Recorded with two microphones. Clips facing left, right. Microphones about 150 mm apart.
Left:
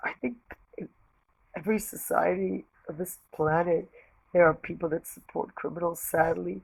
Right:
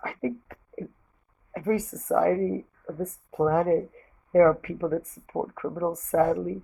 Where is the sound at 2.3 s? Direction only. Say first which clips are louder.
Right 3 dB; 40° right (ahead or behind).